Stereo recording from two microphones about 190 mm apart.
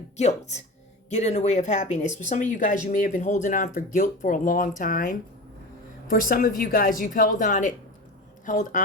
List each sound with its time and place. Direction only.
0.2 s speech: 35° left (ahead or behind)